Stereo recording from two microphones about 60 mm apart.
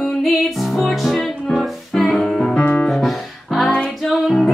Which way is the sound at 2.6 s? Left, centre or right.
Left.